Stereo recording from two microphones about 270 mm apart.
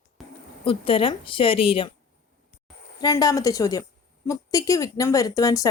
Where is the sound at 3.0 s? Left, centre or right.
Centre.